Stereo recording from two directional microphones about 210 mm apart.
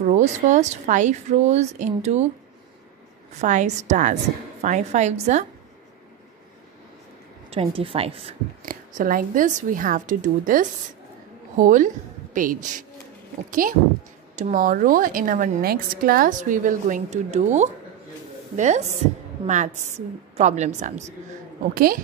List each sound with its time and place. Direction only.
0.0 s a woman's voice: 35° right (ahead or behind)
3.3 s a woman's voice: 35° right (ahead or behind)
7.4 s a woman's voice: 25° right (ahead or behind)
8.6 s a woman's voice: 40° right (ahead or behind)